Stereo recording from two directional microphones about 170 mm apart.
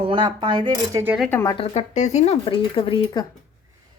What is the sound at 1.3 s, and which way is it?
Speech, 15° left (ahead or behind).